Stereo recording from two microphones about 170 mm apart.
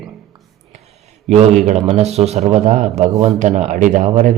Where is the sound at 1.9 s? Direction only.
40° right (ahead or behind).